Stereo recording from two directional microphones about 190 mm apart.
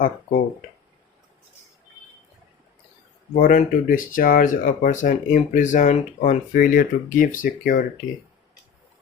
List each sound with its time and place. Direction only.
3.3 s speech: 45° left (ahead or behind)